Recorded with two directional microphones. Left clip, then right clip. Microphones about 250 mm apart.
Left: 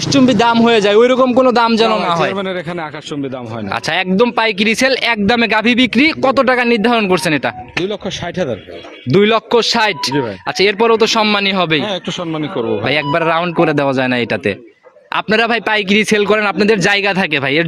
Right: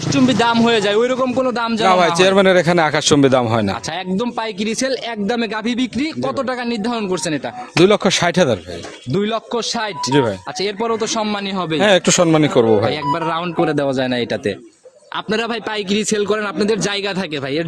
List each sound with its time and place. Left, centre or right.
0.1 s a man's voice: centre; by 1.9 s left
2.0 s a man's voice: right
3.9 s speech: left
7.9 s a man's voice: right
9.1 s speech: left
11.8 s a man's voice: right
12.8 s speech: left